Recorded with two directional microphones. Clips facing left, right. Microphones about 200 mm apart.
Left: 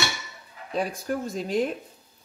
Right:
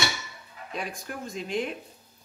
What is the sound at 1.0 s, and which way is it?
Speech, 40° left (ahead or behind).